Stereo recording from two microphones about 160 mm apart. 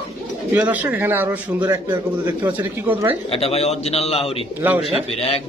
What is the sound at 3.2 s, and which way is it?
A man's voice, 40° left (ahead or behind).